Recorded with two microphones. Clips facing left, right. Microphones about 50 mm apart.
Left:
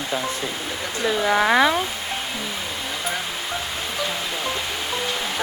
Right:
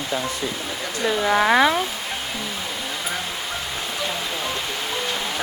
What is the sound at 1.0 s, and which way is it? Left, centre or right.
Speech, centre.